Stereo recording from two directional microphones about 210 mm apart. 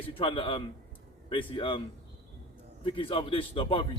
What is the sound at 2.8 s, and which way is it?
A man's voice, 25° left (ahead or behind).